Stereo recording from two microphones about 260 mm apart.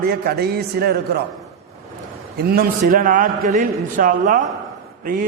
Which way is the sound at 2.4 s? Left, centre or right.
Right.